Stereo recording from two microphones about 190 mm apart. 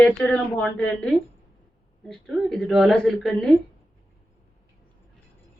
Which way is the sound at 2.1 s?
Centre (ahead or behind).